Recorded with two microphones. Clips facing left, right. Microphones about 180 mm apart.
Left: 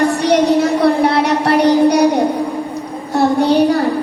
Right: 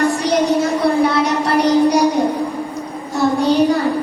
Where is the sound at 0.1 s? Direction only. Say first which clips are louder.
Left 3 dB; 65° left (ahead or behind).